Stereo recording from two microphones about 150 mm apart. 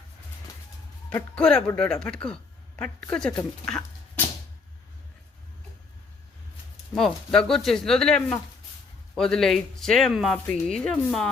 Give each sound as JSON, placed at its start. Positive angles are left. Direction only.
{"t": 1.4, "sound": "a woman's voice", "side_deg": 5}
{"t": 6.9, "sound": "speech", "side_deg": 5}